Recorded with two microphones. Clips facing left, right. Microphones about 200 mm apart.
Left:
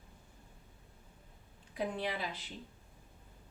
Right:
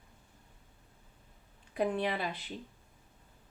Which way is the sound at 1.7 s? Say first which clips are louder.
Right 5 dB; 60° right (ahead or behind).